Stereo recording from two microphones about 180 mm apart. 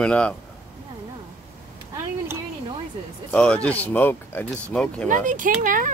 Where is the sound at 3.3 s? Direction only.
5° left (ahead or behind).